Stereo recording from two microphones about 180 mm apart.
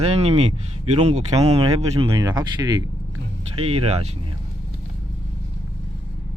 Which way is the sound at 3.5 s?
35° right (ahead or behind).